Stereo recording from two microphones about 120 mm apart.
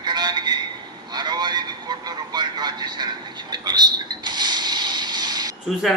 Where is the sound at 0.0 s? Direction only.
35° right (ahead or behind).